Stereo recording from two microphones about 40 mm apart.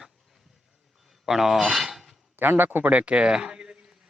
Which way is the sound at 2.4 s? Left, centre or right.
Right.